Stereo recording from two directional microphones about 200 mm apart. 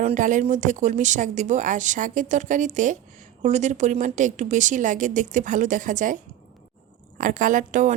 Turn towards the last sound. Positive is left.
turn(degrees=-40)  # may be behind; listen again after turning